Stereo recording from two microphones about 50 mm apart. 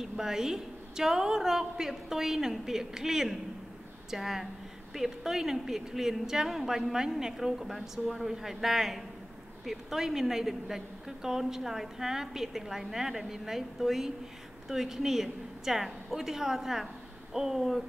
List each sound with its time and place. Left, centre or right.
0.0 s a woman's voice: centre